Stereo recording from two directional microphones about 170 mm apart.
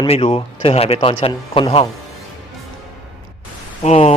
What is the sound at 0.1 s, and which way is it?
Speech, 35° left (ahead or behind).